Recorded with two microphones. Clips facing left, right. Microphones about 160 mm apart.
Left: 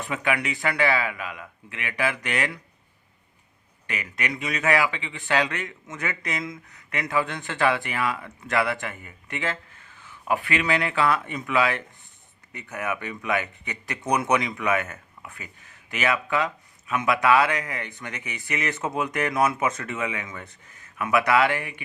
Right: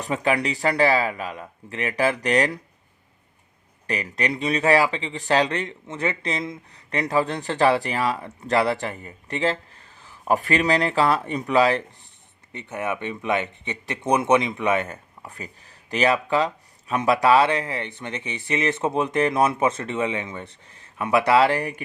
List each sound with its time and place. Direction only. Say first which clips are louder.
0.0 s speech: right 4 dB; 35° right (ahead or behind)
3.8 s speech: right 5 dB; 35° right (ahead or behind)